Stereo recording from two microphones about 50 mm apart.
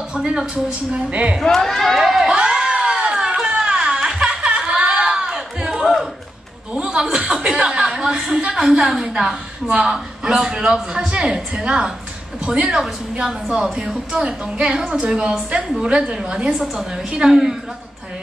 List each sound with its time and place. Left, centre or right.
0.1 s a woman's voice: centre
1.4 s speech: centre
2.2 s a sound: centre
6.7 s chuckle: centre
8.4 s a woman's voice: centre
16.4 s a woman's voice: centre